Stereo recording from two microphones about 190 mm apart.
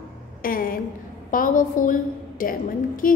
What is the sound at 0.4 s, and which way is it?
A woman's voice, 50° left (ahead or behind).